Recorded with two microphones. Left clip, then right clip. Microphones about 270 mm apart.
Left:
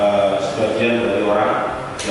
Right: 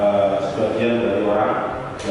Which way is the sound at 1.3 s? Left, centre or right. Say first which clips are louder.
Left 3 dB; centre.